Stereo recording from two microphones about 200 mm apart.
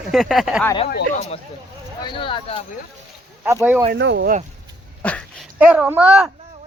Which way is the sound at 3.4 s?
10° right (ahead or behind).